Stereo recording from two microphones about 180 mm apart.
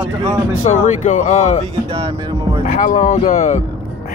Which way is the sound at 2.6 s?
45° left (ahead or behind).